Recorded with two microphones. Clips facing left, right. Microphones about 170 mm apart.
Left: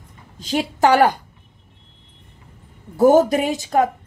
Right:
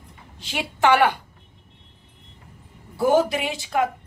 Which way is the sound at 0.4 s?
40° left (ahead or behind).